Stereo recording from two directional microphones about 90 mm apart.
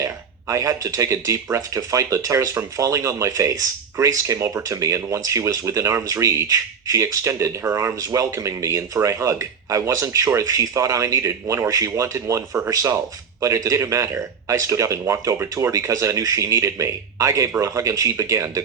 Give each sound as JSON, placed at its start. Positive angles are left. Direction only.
{"t": 0.0, "sound": "speech", "side_deg": -35}